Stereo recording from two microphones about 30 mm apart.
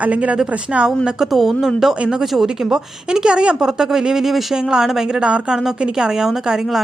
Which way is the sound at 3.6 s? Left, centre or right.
Centre.